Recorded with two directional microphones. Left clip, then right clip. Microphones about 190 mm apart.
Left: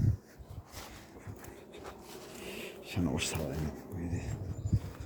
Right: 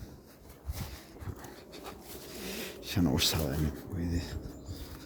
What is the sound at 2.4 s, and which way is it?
Speech, 35° right (ahead or behind).